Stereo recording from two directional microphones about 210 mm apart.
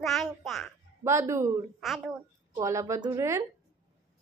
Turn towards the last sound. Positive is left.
turn(degrees=-15)  # may be behind; listen again after turning